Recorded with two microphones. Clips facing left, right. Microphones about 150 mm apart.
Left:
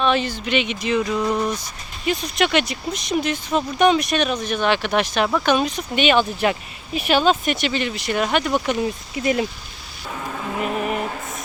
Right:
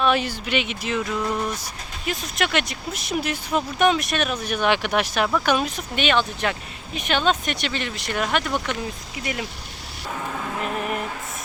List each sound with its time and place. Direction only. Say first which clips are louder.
0.0 s speech: left 1 dB; 10° right (ahead or behind)
9.1 s speech: left 9 dB; 30° left (ahead or behind)
10.6 s vehicle: left 5 dB; 5° left (ahead or behind)